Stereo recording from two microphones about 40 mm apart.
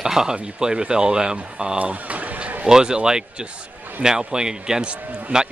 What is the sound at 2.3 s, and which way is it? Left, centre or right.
Music, right.